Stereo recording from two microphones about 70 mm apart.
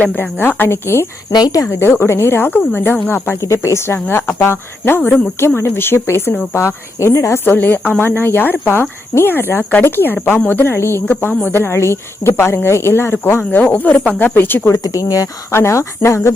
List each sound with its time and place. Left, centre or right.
0.0 s speech: left
1.3 s speech: left
1.7 s speech: left
3.4 s speech: left
4.0 s speech: left
4.4 s speech: left
13.5 s speech: left
14.8 s speech: left
15.5 s speech: left